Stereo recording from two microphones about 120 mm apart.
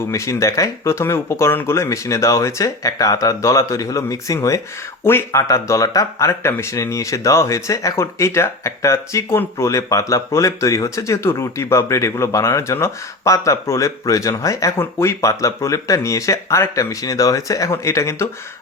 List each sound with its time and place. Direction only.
0.1 s speech: 25° left (ahead or behind)